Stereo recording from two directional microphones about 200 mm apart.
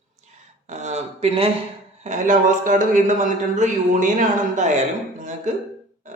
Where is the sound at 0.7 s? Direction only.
35° right (ahead or behind).